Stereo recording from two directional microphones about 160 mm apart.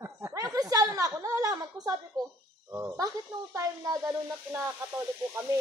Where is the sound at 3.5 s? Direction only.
20° right (ahead or behind).